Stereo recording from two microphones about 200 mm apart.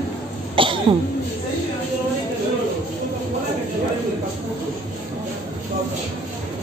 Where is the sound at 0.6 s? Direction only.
25° right (ahead or behind).